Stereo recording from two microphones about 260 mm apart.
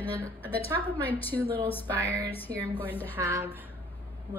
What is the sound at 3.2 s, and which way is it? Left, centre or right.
Speech, centre.